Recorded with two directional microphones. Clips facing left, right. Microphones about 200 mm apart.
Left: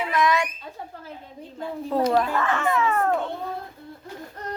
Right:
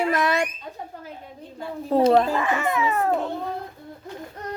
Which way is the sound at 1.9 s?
30° right (ahead or behind).